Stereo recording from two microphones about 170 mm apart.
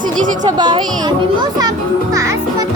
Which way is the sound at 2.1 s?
20° right (ahead or behind).